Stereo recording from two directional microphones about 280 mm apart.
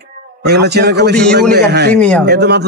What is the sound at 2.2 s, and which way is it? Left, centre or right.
Speech, right.